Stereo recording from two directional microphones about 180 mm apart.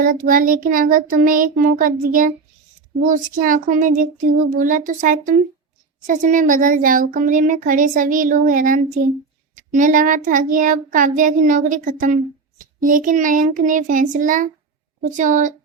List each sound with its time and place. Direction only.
0.0 s a child's voice: 50° right (ahead or behind)
3.4 s a child's voice: 50° right (ahead or behind)